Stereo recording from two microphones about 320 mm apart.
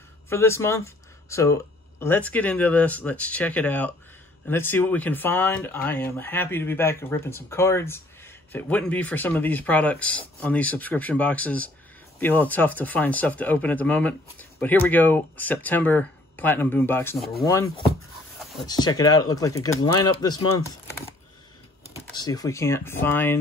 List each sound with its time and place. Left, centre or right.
0.3 s speech: centre
18.7 s speech: centre
22.0 s speech: centre